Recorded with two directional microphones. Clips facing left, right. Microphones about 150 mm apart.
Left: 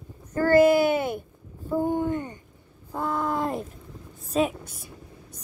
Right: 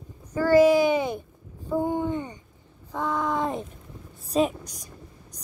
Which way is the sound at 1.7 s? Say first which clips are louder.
Left 1 dB; 20° right (ahead or behind).